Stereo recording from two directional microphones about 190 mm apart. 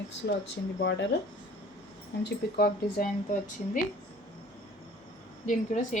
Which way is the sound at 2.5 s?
50° left (ahead or behind).